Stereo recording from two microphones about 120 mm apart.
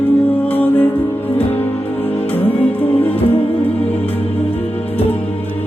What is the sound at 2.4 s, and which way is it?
Music, 15° left (ahead or behind).